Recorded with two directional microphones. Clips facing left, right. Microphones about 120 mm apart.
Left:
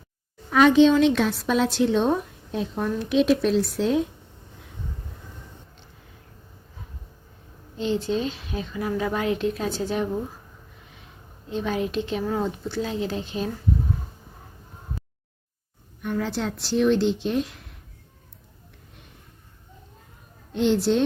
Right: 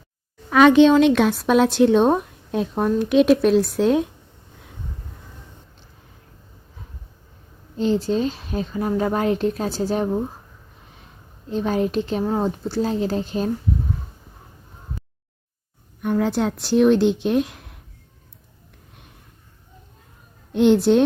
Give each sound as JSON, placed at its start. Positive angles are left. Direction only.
{"t": 0.5, "sound": "a woman's voice", "side_deg": -70}
{"t": 7.8, "sound": "speech", "side_deg": -40}
{"t": 11.5, "sound": "speech", "side_deg": -40}
{"t": 16.0, "sound": "speech", "side_deg": -55}
{"t": 20.5, "sound": "a woman's voice", "side_deg": -60}